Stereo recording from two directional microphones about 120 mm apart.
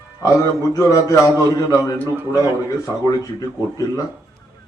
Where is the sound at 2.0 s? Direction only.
20° right (ahead or behind).